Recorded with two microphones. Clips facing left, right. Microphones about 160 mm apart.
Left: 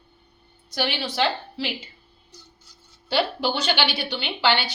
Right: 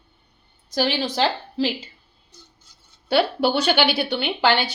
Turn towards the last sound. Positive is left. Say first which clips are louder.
# right 3 dB
turn(degrees=-45)  # may be behind; listen again after turning